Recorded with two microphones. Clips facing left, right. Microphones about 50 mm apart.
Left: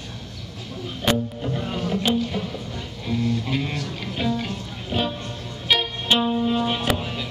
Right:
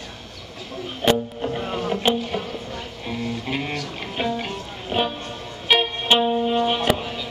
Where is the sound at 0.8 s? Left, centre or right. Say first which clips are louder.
Right 3 dB; right.